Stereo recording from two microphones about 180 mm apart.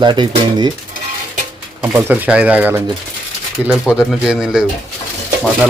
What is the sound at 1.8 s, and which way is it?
Speech, 10° right (ahead or behind).